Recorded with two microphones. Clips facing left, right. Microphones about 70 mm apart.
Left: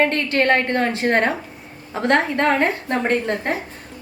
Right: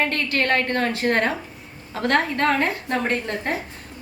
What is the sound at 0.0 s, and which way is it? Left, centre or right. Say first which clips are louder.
A woman's voice: left 5 dB; left.